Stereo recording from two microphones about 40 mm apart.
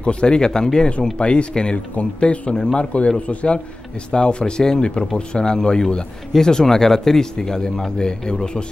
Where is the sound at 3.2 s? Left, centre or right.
Left.